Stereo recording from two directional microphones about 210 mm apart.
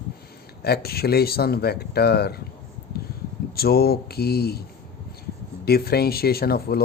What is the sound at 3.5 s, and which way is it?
Speech, 45° left (ahead or behind).